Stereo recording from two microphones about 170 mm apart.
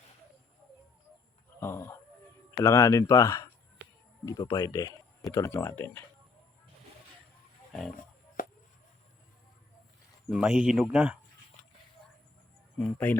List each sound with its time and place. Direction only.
1.5 s a sound: 15° left (ahead or behind)
2.6 s speech: 15° left (ahead or behind)
8.4 s chop: 55° left (ahead or behind)
10.2 s speech: 5° right (ahead or behind)
12.8 s speech: 10° left (ahead or behind)